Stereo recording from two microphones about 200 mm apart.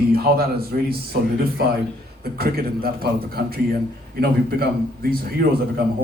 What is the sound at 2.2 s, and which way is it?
Speech, 50° right (ahead or behind).